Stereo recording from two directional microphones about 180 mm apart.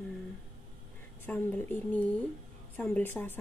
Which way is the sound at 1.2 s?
10° left (ahead or behind).